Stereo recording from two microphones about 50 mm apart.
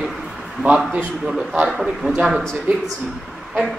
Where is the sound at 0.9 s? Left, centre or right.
Centre.